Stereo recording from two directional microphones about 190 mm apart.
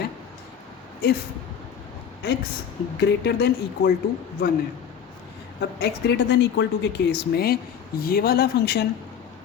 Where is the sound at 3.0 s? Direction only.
60° left (ahead or behind).